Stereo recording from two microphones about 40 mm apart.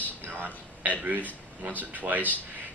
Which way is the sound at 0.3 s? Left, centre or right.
Right.